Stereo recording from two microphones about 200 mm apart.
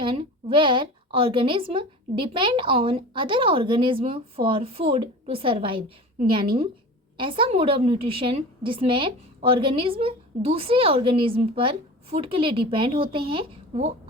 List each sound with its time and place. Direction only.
0.0 s a woman's voice: 25° right (ahead or behind)
7.2 s a woman's voice: 25° right (ahead or behind)